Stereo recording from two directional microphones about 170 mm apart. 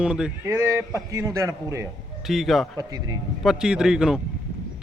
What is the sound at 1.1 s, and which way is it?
Speech, 15° right (ahead or behind).